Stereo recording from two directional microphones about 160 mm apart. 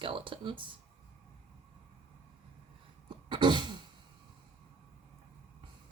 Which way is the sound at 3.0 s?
30° right (ahead or behind).